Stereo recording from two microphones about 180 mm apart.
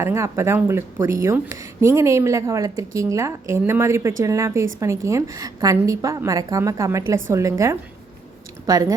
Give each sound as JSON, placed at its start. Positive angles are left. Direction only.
{"t": 0.0, "sound": "speech", "side_deg": -15}